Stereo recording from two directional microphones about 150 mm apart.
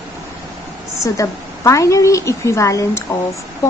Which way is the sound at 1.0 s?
20° left (ahead or behind).